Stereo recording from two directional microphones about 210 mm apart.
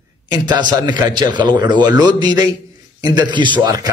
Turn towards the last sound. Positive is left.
turn(degrees=-15)  # may be behind; listen again after turning